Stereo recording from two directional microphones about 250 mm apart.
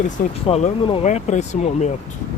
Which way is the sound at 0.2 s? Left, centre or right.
Left.